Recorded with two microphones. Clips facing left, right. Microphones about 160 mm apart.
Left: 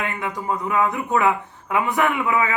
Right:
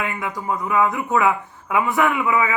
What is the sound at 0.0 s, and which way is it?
Speech, 25° left (ahead or behind).